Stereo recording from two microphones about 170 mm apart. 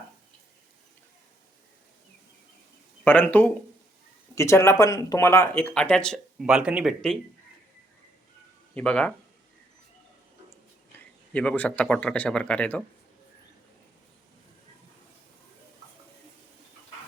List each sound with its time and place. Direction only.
3.0 s speech: 10° left (ahead or behind)
6.4 s speech: 5° right (ahead or behind)
8.7 s speech: 5° left (ahead or behind)
11.3 s speech: 10° left (ahead or behind)